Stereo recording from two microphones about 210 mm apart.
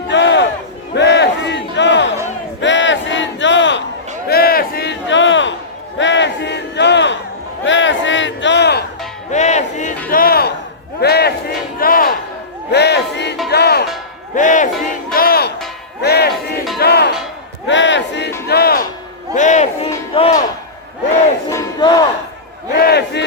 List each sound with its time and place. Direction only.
0.1 s crowd: 60° left (ahead or behind)
0.9 s battle cry: 55° left (ahead or behind)
4.3 s a sound: 45° left (ahead or behind); by 5.5 s 60° left (ahead or behind)
6.0 s battle cry: 60° left (ahead or behind)
7.6 s a sound: 60° left (ahead or behind)
9.3 s music: 35° left (ahead or behind)
10.1 s crowd: 45° left (ahead or behind)
12.7 s music: 55° left (ahead or behind)
14.3 s music: 35° left (ahead or behind)
17.7 s battle cry: 60° left (ahead or behind)
18.4 s music: 50° left (ahead or behind)
19.3 s music: 35° left (ahead or behind)
21.5 s battle cry: 20° left (ahead or behind)
22.7 s a sound: 50° left (ahead or behind)